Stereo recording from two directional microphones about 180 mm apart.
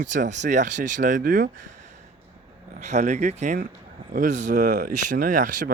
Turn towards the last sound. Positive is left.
turn(degrees=-45)  # may be behind; listen again after turning